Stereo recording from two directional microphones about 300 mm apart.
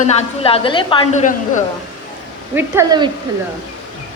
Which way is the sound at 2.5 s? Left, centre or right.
Centre.